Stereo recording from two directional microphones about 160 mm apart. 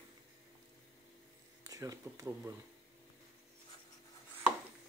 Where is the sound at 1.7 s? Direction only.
20° right (ahead or behind).